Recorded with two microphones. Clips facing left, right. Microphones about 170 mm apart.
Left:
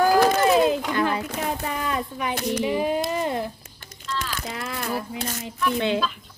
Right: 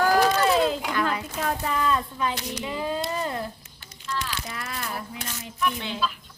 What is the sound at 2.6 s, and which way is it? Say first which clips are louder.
Speech: left 3 dB; 20° left (ahead or behind).